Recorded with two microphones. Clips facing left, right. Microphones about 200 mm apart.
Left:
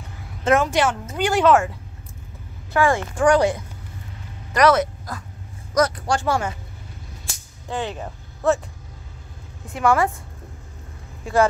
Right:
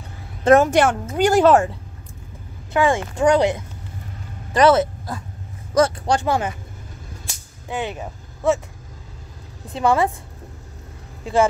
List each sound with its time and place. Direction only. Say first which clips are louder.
0.4 s a woman's voice: right 5 dB; 40° right (ahead or behind)
2.7 s speech: right 1 dB; 20° right (ahead or behind)
7.6 s speech: right 1 dB; 15° right (ahead or behind)
9.7 s speech: right 1 dB; 20° right (ahead or behind)